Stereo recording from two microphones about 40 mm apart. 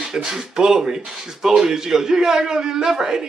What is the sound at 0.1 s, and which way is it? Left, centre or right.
A man's voice, centre.